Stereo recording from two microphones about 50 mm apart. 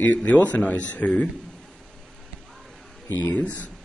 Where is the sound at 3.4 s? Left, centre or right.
Left.